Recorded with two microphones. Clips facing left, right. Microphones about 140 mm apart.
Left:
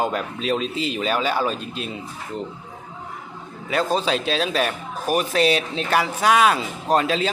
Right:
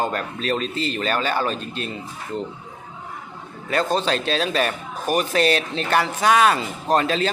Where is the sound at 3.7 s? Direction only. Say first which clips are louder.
Even; 5° left (ahead or behind).